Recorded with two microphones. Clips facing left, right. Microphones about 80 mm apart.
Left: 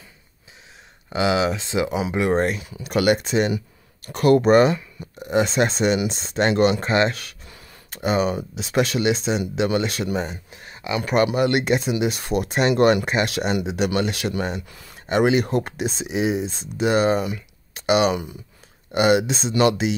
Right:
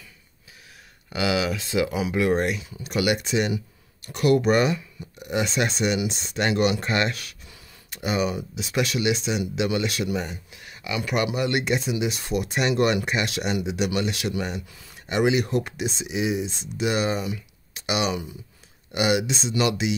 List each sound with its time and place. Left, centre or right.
1.1 s speech: left
2.6 s speech: left
6.8 s speech: left
11.2 s speech: left